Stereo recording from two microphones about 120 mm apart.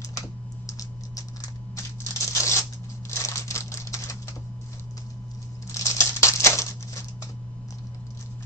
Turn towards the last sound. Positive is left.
turn(degrees=25)  # may be behind; listen again after turning